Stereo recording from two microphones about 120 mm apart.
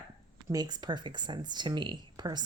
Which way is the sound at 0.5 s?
35° right (ahead or behind).